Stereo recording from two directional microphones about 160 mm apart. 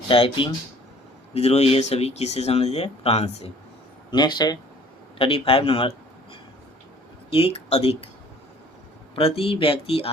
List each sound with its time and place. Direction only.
0.1 s speech: 35° left (ahead or behind)
4.1 s speech: 25° left (ahead or behind)
7.3 s speech: 40° left (ahead or behind)
9.1 s speech: 35° left (ahead or behind)